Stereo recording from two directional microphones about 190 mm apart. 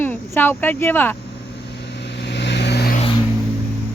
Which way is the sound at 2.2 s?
65° left (ahead or behind).